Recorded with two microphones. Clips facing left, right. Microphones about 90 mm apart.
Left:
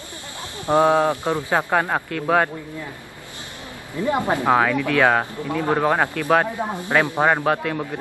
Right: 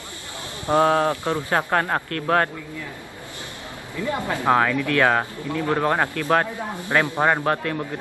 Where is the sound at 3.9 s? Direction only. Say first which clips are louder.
Left 5 dB; 20° left (ahead or behind).